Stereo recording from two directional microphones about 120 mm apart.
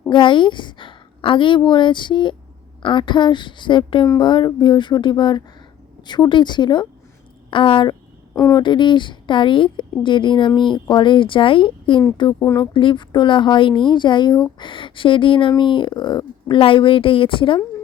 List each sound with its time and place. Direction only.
0.1 s a woman's voice: 40° left (ahead or behind)
8.4 s speech: 25° left (ahead or behind)
8.6 s a woman's voice: 40° left (ahead or behind)